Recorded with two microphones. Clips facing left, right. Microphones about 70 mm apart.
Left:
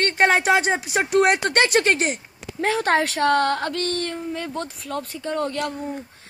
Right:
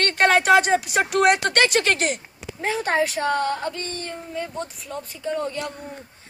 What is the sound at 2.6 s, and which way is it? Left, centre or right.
Speech, left.